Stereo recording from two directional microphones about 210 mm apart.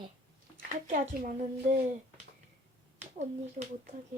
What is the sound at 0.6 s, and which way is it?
Speech, 40° right (ahead or behind).